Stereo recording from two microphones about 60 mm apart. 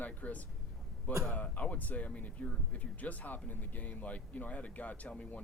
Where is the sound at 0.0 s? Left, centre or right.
Left.